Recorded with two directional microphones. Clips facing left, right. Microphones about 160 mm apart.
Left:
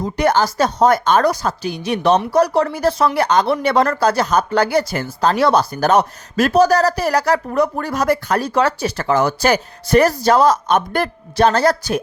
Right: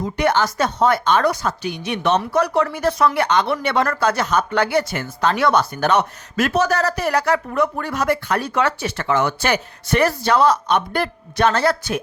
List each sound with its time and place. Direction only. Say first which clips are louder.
0.0 s speech: left 2 dB; 40° left (ahead or behind)